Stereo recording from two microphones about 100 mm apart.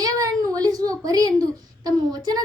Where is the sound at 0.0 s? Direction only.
40° right (ahead or behind).